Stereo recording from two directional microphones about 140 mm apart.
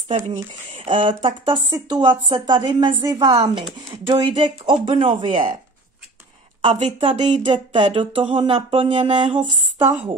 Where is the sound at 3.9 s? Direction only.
40° right (ahead or behind).